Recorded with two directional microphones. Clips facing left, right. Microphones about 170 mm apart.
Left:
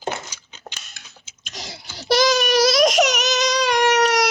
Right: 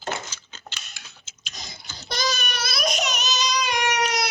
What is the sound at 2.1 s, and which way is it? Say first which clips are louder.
Child singing: left 12 dB; 90° left.